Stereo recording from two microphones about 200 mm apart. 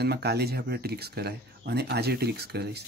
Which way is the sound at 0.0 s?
55° right (ahead or behind).